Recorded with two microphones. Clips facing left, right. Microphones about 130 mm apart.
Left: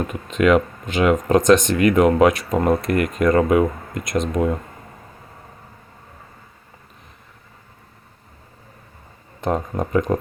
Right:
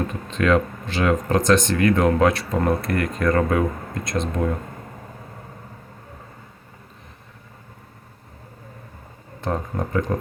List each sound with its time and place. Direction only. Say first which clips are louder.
0.1 s speech: left 5 dB; 15° left (ahead or behind)
9.4 s speech: left 3 dB; 20° left (ahead or behind)